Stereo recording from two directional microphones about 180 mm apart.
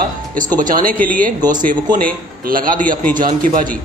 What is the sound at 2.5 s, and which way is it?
Speech, 50° right (ahead or behind).